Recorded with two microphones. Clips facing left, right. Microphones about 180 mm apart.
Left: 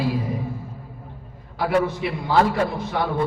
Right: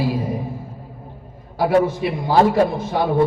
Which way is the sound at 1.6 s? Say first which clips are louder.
Right 4 dB; 20° right (ahead or behind).